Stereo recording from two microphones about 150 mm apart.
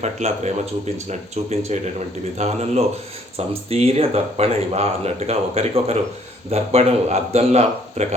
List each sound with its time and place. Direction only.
0.0 s speech: 50° right (ahead or behind)